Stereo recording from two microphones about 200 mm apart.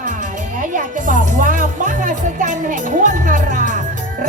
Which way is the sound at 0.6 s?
40° right (ahead or behind).